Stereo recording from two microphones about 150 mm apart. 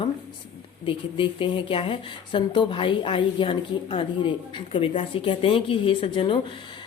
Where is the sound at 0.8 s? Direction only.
35° left (ahead or behind).